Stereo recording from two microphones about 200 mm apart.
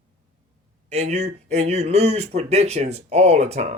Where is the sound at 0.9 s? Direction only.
35° right (ahead or behind).